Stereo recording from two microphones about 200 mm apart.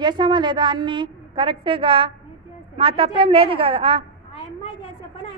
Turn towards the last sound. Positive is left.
turn(degrees=-25)  # may be behind; listen again after turning